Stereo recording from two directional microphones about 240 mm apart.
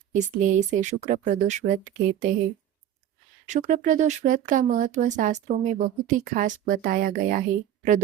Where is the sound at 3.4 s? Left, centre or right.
Right.